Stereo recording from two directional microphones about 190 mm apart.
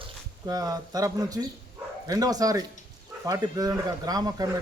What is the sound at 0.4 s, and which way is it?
Speech, 20° right (ahead or behind).